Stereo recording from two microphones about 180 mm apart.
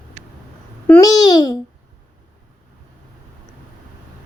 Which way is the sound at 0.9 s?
15° left (ahead or behind).